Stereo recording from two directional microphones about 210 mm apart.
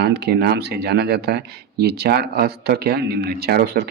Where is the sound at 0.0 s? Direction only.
50° right (ahead or behind).